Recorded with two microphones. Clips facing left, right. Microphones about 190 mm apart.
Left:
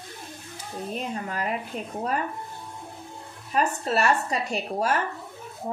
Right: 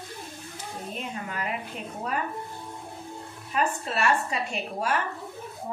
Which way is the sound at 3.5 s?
40° left (ahead or behind).